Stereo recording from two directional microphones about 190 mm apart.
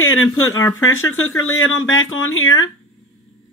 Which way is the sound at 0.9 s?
90° left.